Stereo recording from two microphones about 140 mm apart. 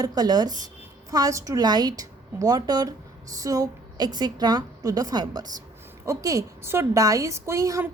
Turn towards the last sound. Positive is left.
turn(degrees=-20)  # may be behind; listen again after turning